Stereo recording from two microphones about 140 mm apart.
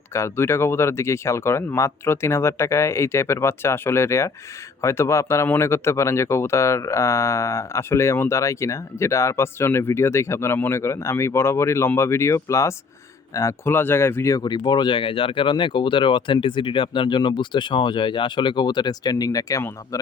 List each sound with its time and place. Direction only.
0.1 s speech: 20° left (ahead or behind)